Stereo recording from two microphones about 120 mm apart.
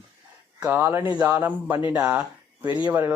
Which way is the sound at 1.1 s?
30° right (ahead or behind).